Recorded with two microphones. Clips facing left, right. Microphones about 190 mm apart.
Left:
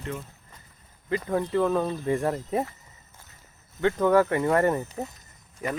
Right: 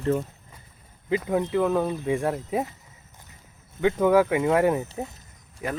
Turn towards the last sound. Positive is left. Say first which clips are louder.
# even
turn(degrees=-5)  # may be behind; listen again after turning